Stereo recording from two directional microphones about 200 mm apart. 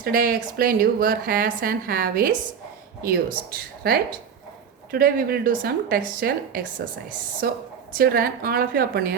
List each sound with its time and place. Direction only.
0.0 s a woman's voice: 45° right (ahead or behind)